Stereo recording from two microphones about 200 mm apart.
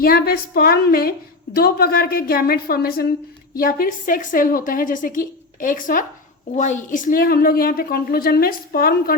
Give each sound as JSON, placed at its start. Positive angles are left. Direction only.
{"t": 0.0, "sound": "a woman's voice", "side_deg": 50}